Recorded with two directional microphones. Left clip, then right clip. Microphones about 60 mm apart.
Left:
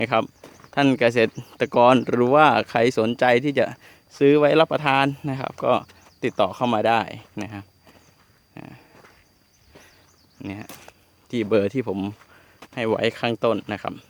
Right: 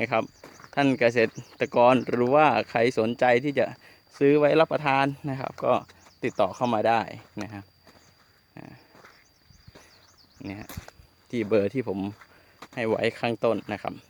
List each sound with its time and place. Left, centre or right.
0.0 s speech: left
0.4 s a sound: centre
0.8 s speech: left
4.1 s speech: centre
8.5 s a sound: left
10.4 s speech: left
11.4 s speech: centre